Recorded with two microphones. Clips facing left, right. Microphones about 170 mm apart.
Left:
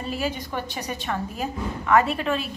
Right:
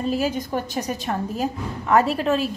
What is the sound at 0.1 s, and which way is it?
A woman's voice, 40° right (ahead or behind).